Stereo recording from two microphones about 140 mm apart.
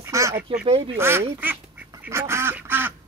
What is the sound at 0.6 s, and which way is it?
Speech, 40° right (ahead or behind).